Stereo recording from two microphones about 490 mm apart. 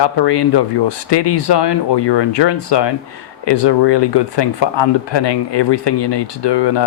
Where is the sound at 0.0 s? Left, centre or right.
Left.